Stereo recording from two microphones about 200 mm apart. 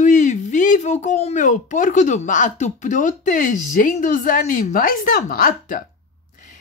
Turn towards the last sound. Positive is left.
turn(degrees=45)  # may be behind; listen again after turning